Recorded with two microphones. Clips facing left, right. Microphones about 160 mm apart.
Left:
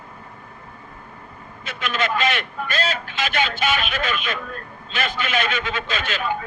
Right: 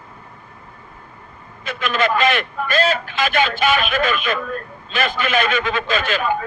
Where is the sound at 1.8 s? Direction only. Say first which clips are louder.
Right 4 dB; 50° right (ahead or behind).